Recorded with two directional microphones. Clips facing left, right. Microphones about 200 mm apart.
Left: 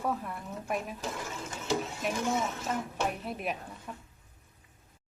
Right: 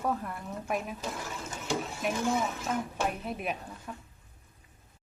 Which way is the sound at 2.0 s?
Centre (ahead or behind).